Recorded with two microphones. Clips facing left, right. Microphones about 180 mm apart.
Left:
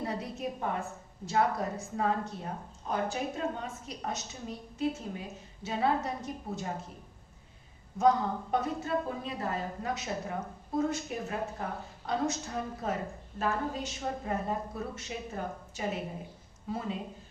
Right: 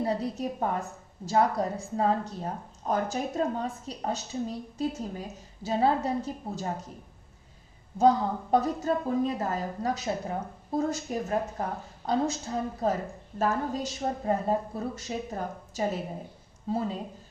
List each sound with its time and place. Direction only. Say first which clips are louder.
0.0 s a woman's voice: right 6 dB; 35° right (ahead or behind)
7.9 s a woman's voice: right 3 dB; 35° right (ahead or behind)